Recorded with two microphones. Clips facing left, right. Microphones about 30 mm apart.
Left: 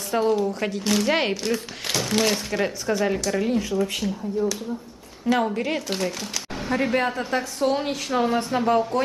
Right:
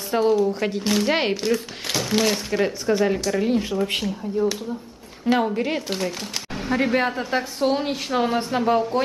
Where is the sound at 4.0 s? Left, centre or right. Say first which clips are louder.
Right 2 dB; centre.